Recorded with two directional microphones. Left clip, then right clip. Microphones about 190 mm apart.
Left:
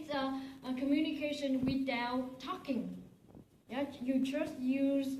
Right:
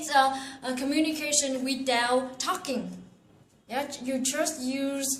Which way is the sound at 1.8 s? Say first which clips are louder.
Right 11 dB; 60° right (ahead or behind).